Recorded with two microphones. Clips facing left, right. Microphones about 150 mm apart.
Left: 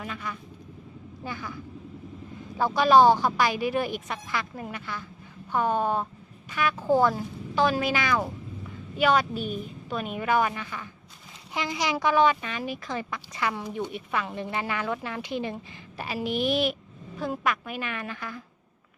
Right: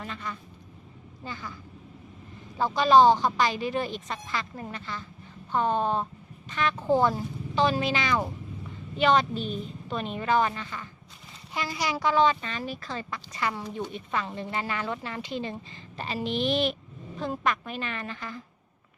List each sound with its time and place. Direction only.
0.0 s speech: 5° left (ahead or behind)
2.6 s speech: 10° left (ahead or behind)
6.5 s speech: 5° left (ahead or behind)
7.0 s speech: 15° right (ahead or behind)
7.5 s speech: 5° left (ahead or behind)